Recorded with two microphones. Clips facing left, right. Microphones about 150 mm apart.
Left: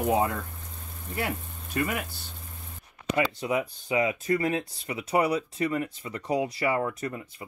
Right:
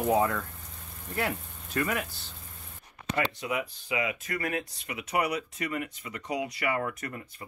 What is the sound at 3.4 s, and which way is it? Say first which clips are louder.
Speech: left 4 dB; 30° left (ahead or behind).